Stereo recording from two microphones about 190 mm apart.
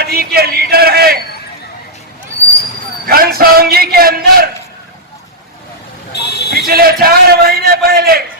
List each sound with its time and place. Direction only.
0.0 s speech: 55° right (ahead or behind)
3.1 s a man's voice: 50° right (ahead or behind)
6.1 s a sound: 60° left (ahead or behind)
6.5 s a man's voice: 55° right (ahead or behind)